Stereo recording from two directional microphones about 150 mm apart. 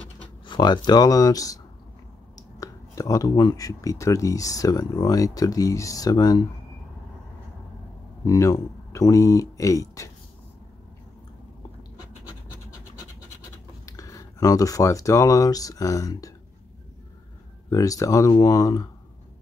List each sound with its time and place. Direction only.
0.5 s speech: 30° left (ahead or behind)
8.3 s speech: 20° left (ahead or behind)
13.8 s speech: 20° left (ahead or behind)
17.6 s speech: 20° left (ahead or behind)